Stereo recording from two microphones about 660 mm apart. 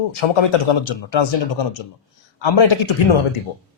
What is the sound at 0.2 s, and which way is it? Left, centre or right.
Speech, left.